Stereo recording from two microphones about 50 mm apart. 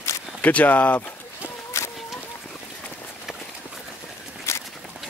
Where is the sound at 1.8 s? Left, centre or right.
Left.